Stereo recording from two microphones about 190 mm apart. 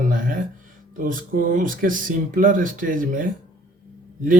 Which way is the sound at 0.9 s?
45° right (ahead or behind).